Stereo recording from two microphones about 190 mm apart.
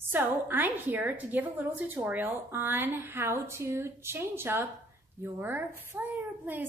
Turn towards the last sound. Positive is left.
turn(degrees=-10)  # may be behind; listen again after turning